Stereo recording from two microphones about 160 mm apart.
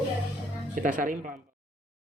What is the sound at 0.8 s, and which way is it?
Speech, 55° right (ahead or behind).